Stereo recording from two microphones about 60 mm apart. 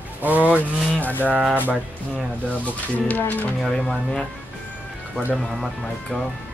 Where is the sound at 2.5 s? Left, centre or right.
Left.